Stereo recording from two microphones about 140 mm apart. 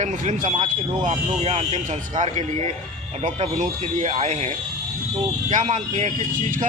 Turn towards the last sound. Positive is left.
turn(degrees=-65)  # may be behind; listen again after turning